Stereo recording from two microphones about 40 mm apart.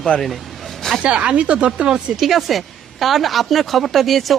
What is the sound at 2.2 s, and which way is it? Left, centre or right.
Speech, centre.